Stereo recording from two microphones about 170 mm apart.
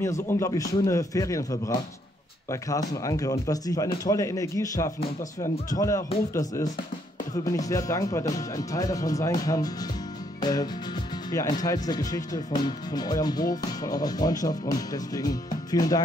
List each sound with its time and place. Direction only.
0.0 s speech: 15° left (ahead or behind)